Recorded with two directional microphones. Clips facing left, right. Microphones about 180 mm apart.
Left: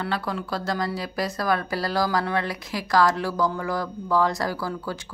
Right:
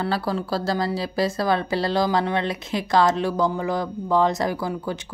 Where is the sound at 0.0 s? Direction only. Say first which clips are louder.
Right 4 dB; 30° right (ahead or behind).